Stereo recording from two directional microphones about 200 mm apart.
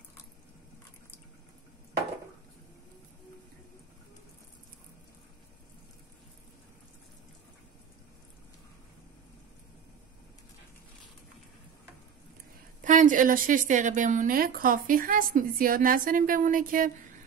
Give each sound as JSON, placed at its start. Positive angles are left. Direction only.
{"t": 12.8, "sound": "a woman's voice", "side_deg": -40}